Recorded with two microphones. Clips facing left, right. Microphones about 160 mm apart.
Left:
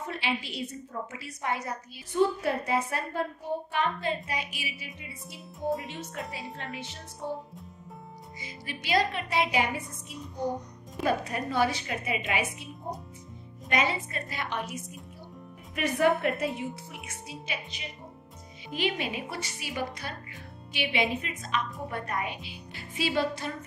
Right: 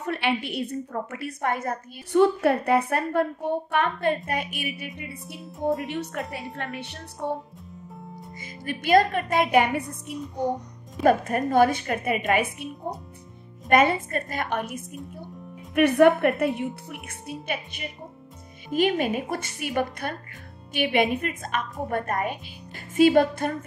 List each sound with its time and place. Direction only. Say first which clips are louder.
0.0 s a woman's voice: right 6 dB; 65° right (ahead or behind)
5.6 s speech: right 5 dB; centre (ahead or behind)
5.9 s a woman's voice: right 7 dB; 60° right (ahead or behind)
8.4 s a woman's voice: right 8 dB; 50° right (ahead or behind)
11.1 s a woman's voice: right 8 dB; 50° right (ahead or behind)